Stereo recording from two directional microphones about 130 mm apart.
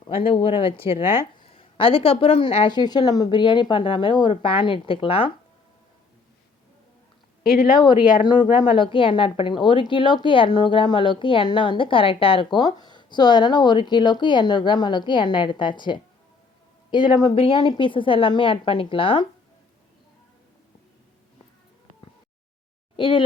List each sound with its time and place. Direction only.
0.1 s speech: 45° left (ahead or behind)
2.6 s a woman's voice: 35° left (ahead or behind)
7.8 s a woman's voice: 35° left (ahead or behind)
23.0 s speech: 40° left (ahead or behind)